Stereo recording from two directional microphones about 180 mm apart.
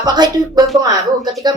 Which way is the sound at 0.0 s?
20° right (ahead or behind).